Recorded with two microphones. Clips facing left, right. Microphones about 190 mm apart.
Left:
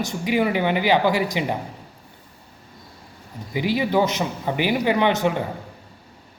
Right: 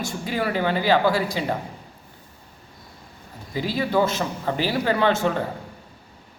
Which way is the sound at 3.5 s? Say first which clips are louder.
Left 2 dB; 15° left (ahead or behind).